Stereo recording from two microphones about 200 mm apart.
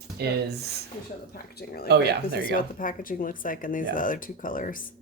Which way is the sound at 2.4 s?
45° left (ahead or behind).